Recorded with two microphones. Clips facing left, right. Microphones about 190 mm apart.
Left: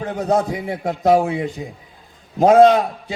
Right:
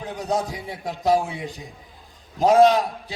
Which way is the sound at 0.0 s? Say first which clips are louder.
Left 6 dB; 55° left (ahead or behind).